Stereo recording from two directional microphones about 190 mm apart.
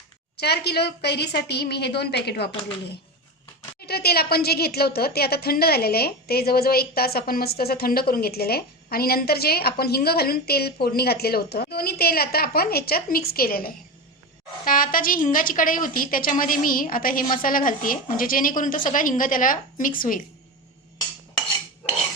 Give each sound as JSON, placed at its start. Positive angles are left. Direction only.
{"t": 0.3, "sound": "a woman's voice", "side_deg": 60}
{"t": 3.8, "sound": "a woman's voice", "side_deg": 55}